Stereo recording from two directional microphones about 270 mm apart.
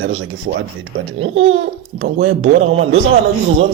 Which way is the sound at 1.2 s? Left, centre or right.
Right.